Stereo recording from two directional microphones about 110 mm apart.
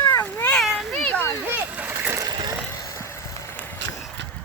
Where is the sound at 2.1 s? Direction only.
35° right (ahead or behind).